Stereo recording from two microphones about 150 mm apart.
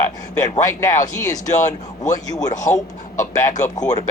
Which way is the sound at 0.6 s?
25° left (ahead or behind).